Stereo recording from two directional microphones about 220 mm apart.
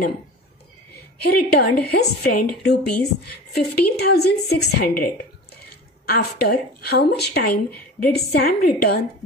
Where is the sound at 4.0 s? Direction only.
45° left (ahead or behind).